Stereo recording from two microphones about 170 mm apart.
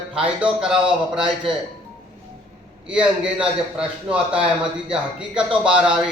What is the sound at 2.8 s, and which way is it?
A man's voice, 5° right (ahead or behind).